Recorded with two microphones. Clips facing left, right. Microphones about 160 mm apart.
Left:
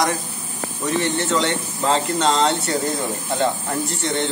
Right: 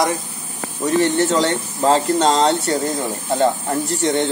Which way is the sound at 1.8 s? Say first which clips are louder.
Right 4 dB; 40° right (ahead or behind).